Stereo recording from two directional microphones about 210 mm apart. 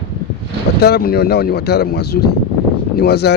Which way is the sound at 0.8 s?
50° left (ahead or behind).